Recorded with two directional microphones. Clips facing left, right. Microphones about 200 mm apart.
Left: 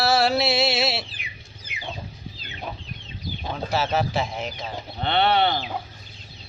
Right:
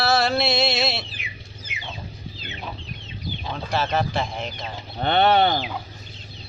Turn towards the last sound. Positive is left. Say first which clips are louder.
# right 3 dB
turn(degrees=-45)  # may be behind; listen again after turning